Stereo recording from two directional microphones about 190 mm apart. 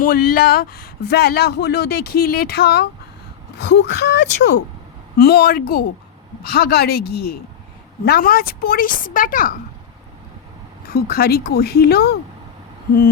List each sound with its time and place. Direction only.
0.0 s speech: 50° left (ahead or behind)
10.8 s speech: 55° left (ahead or behind)